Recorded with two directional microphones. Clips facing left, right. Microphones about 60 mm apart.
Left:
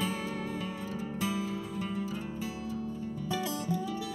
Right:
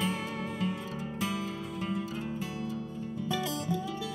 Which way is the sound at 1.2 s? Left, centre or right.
Right.